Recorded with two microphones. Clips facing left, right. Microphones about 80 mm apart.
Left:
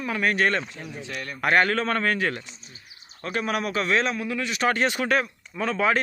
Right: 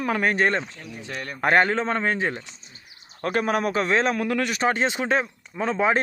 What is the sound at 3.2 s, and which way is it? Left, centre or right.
Speech, right.